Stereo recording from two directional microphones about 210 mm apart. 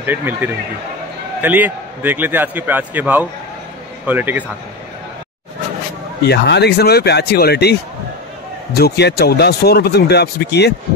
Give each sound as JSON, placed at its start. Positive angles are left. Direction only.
{"t": 0.0, "sound": "a man's voice", "side_deg": -10}
{"t": 6.2, "sound": "speech", "side_deg": 55}
{"t": 8.7, "sound": "speech", "side_deg": 50}